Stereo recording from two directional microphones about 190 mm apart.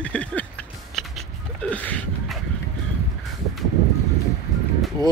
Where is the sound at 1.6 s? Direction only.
5° left (ahead or behind).